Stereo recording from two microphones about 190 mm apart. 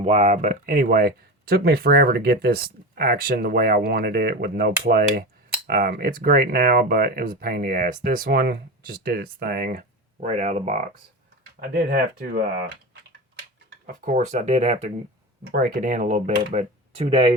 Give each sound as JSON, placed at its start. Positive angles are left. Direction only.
{"t": 0.0, "sound": "speech", "side_deg": -35}
{"t": 10.2, "sound": "speech", "side_deg": -35}
{"t": 11.7, "sound": "speech", "side_deg": -50}
{"t": 13.8, "sound": "speech", "side_deg": -45}
{"t": 15.4, "sound": "speech", "side_deg": -55}